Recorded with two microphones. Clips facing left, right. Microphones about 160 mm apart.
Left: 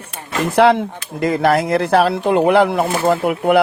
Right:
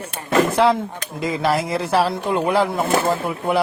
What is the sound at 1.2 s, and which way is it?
Speech, 60° left (ahead or behind).